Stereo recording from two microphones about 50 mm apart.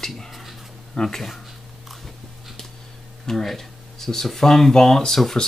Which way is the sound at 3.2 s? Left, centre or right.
Centre.